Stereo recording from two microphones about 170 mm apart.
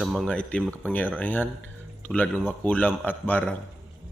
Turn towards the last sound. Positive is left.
turn(degrees=10)  # may be behind; listen again after turning